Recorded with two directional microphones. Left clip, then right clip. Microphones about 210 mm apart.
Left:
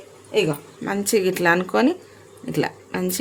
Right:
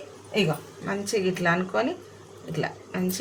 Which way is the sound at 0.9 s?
55° left (ahead or behind).